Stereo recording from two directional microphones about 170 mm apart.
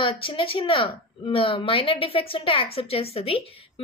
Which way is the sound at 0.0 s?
30° left (ahead or behind).